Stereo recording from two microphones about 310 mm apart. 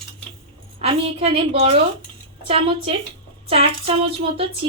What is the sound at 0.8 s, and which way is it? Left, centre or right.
A woman's voice, centre.